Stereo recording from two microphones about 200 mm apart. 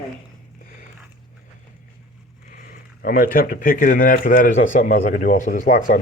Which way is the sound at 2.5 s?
45° left (ahead or behind).